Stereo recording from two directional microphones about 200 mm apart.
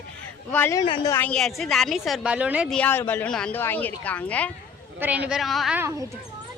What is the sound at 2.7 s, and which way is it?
Speech, 10° left (ahead or behind).